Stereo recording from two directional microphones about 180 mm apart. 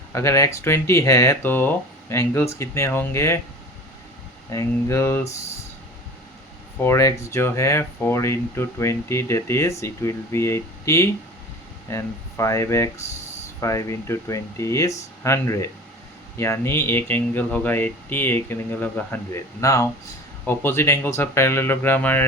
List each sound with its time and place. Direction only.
0.1 s speech: 15° left (ahead or behind)
4.5 s speech: 15° left (ahead or behind)
6.8 s speech: 15° left (ahead or behind)